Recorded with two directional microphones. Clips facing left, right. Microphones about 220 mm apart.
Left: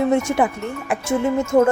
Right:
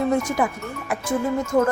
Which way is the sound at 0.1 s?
30° left (ahead or behind).